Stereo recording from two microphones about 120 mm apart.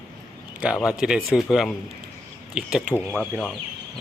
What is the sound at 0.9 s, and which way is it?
Speech, 5° right (ahead or behind).